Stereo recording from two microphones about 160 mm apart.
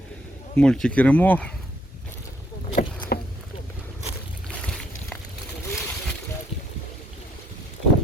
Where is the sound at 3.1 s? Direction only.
80° left.